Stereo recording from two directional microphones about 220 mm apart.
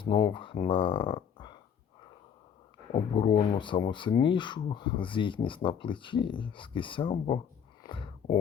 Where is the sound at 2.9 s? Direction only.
25° left (ahead or behind).